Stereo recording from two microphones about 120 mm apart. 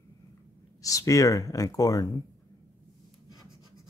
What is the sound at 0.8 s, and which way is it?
Speech, 25° left (ahead or behind).